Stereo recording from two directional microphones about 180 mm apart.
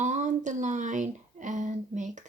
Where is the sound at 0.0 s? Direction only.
40° right (ahead or behind).